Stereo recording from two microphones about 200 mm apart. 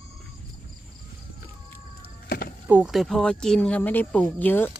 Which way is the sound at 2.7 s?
5° right (ahead or behind).